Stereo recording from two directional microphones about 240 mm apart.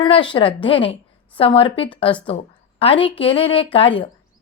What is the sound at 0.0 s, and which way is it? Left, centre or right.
A woman's voice, left.